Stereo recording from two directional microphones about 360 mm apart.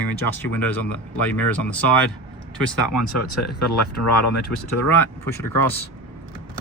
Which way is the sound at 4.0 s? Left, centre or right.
Left.